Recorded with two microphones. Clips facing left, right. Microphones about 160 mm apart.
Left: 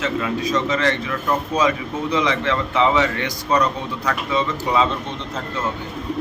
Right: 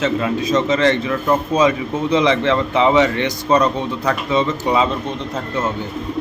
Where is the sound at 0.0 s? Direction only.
25° right (ahead or behind).